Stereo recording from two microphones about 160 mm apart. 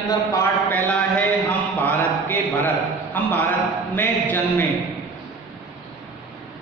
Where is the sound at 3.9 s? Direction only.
10° left (ahead or behind).